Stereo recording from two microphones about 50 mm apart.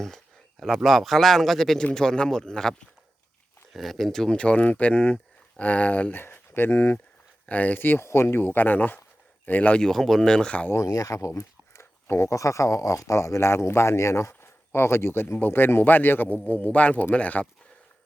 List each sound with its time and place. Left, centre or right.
0.8 s a man's voice: centre
4.4 s speech: left
8.0 s speech: left
9.7 s a man's voice: centre
10.8 s speech: left
15.4 s speech: left